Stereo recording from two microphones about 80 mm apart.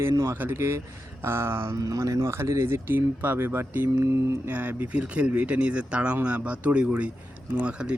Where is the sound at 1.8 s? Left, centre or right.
Right.